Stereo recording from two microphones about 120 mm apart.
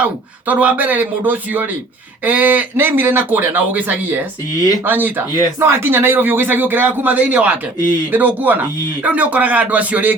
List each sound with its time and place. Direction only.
0.0 s speech: 10° right (ahead or behind)
4.5 s speech: 30° left (ahead or behind)
4.9 s speech: 15° right (ahead or behind)